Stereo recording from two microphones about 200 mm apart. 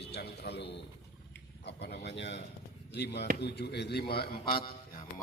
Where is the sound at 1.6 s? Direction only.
55° left (ahead or behind).